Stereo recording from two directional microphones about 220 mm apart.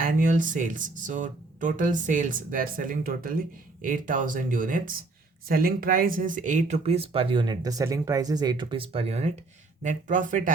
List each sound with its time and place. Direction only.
0.0 s speech: 40° right (ahead or behind)